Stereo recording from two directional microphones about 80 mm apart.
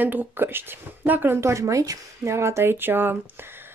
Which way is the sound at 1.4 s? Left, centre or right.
Right.